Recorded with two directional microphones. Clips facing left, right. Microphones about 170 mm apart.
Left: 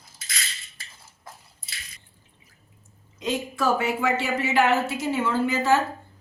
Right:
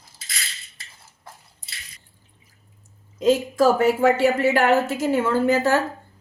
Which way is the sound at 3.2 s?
45° right (ahead or behind).